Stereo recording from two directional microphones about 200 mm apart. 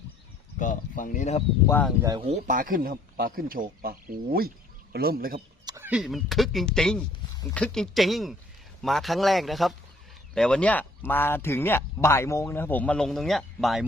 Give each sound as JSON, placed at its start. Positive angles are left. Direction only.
{"t": 0.6, "sound": "speech", "side_deg": 40}
{"t": 1.6, "sound": "speech", "side_deg": 10}
{"t": 2.0, "sound": "speech", "side_deg": -20}
{"t": 2.2, "sound": "a man's voice", "side_deg": -35}
{"t": 5.6, "sound": "a man's voice", "side_deg": -15}